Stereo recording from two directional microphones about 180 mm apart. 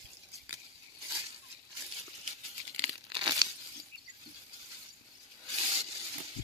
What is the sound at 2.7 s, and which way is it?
Tearing, 30° right (ahead or behind).